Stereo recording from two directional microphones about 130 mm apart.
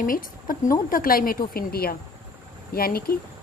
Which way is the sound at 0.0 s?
90° left.